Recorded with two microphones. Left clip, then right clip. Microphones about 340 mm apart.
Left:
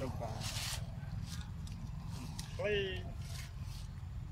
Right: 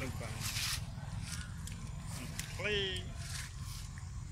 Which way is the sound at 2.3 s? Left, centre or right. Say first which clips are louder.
Even; left.